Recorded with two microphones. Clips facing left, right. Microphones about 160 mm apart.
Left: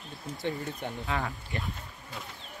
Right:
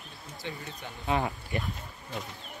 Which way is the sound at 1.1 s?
20° right (ahead or behind).